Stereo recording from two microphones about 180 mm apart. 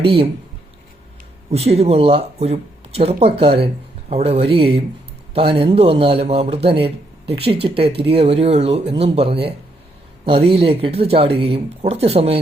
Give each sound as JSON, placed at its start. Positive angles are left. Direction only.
{"t": 0.0, "sound": "a man's voice", "side_deg": -30}
{"t": 1.5, "sound": "a man's voice", "side_deg": -35}